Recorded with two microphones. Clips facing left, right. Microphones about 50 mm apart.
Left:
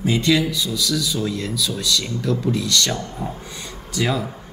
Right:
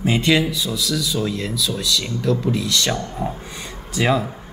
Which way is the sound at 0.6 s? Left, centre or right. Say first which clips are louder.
Even; centre.